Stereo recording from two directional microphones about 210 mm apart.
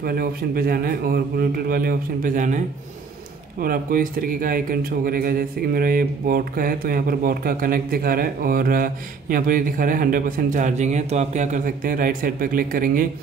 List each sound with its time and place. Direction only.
0.0 s speech: 45° right (ahead or behind)
3.6 s speech: 45° right (ahead or behind)